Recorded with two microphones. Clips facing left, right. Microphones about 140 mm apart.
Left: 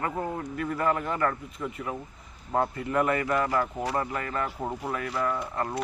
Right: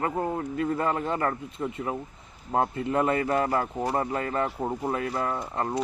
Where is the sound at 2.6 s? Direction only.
25° right (ahead or behind).